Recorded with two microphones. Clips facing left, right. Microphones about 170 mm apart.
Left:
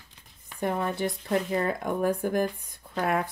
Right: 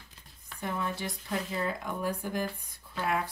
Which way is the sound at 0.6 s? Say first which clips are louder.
Left 7 dB; 55° left (ahead or behind).